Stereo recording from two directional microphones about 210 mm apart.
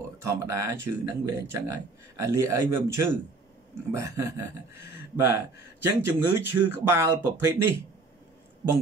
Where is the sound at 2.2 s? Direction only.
15° right (ahead or behind).